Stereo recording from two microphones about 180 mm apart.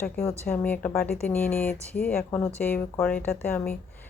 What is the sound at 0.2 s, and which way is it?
A woman's voice, 15° left (ahead or behind).